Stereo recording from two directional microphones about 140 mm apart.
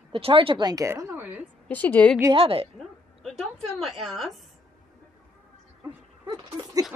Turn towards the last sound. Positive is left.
turn(degrees=-30)  # may be behind; listen again after turning